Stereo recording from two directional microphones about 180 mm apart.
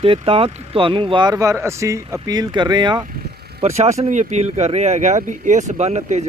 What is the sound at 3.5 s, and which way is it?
Speech, 35° right (ahead or behind).